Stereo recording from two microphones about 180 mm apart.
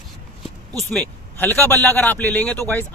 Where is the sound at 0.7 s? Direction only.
5° left (ahead or behind).